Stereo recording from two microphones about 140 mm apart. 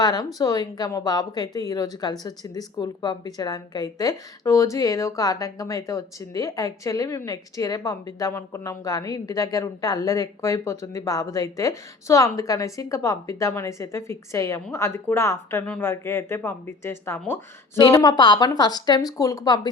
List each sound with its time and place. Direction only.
0.0 s speech: 30° left (ahead or behind)
15.6 s speech: 5° left (ahead or behind)
15.9 s speech: 20° left (ahead or behind)
17.9 s speech: 30° left (ahead or behind)